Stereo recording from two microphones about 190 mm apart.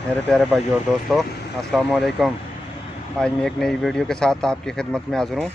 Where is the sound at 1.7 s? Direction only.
Centre (ahead or behind).